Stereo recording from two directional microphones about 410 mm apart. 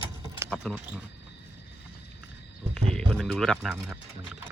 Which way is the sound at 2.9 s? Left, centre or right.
Centre.